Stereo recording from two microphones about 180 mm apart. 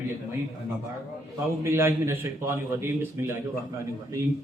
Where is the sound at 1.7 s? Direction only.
15° right (ahead or behind).